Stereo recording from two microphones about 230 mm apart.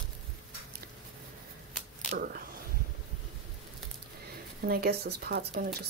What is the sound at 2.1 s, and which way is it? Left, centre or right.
Speech, right.